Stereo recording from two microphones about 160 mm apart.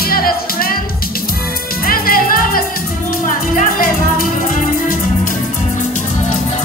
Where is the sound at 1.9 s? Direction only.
65° left (ahead or behind).